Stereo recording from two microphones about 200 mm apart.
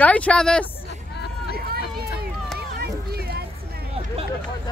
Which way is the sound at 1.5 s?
50° right (ahead or behind).